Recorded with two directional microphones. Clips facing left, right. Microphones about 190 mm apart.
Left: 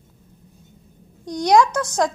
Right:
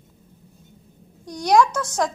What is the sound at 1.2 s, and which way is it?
Speech, 15° left (ahead or behind).